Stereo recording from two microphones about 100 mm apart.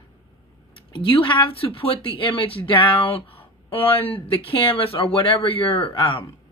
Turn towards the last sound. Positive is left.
turn(degrees=55)  # may be behind; listen again after turning